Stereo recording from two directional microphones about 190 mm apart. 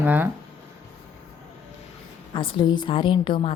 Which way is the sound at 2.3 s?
25° left (ahead or behind).